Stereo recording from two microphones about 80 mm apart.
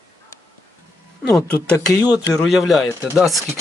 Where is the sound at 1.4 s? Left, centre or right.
Centre.